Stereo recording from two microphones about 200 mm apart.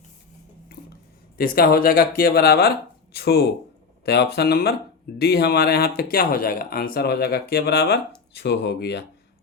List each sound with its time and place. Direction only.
1.4 s speech: 50° left (ahead or behind)